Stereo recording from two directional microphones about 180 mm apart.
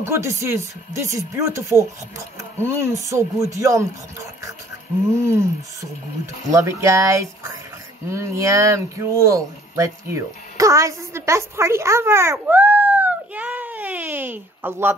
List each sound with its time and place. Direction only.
0.0 s speech: 15° right (ahead or behind)